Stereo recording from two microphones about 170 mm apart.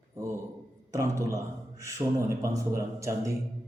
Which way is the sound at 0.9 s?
15° right (ahead or behind).